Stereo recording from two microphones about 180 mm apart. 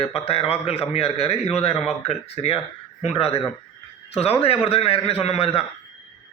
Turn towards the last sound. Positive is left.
turn(degrees=35)  # may be behind; listen again after turning